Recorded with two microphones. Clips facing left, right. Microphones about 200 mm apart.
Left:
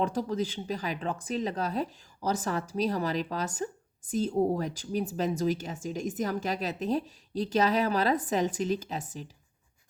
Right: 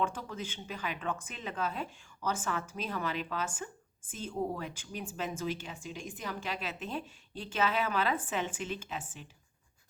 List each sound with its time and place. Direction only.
0.0 s speech: 40° left (ahead or behind)